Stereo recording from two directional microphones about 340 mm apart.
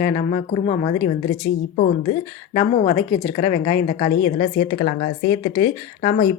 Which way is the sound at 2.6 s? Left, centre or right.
Centre.